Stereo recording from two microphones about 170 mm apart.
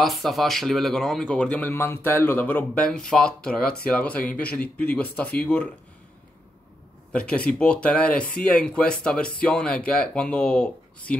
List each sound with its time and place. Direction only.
0.0 s speech: centre (ahead or behind)
7.1 s speech: 5° left (ahead or behind)